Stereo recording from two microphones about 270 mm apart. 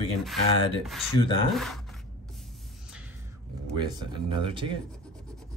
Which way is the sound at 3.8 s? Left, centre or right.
Centre.